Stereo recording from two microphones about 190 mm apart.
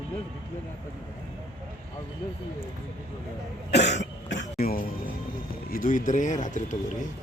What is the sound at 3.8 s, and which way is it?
Speech, 40° left (ahead or behind).